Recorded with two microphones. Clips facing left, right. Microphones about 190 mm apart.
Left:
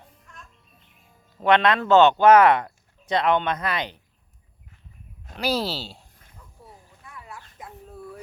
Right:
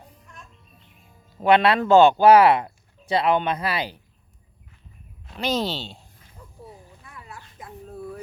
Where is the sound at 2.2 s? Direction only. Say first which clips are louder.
Even; 30° right (ahead or behind).